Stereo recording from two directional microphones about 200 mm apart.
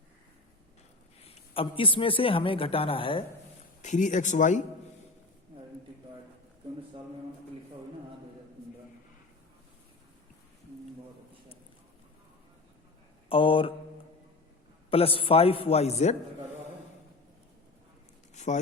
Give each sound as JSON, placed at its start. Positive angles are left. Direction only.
{"t": 1.2, "sound": "a man's voice", "side_deg": 25}
{"t": 3.8, "sound": "speech", "side_deg": 40}
{"t": 13.2, "sound": "a man's voice", "side_deg": 25}
{"t": 14.8, "sound": "a man's voice", "side_deg": 30}
{"t": 18.3, "sound": "a sound", "side_deg": 35}